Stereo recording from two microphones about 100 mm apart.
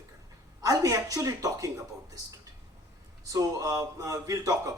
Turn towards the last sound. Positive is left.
turn(degrees=-35)  # may be behind; listen again after turning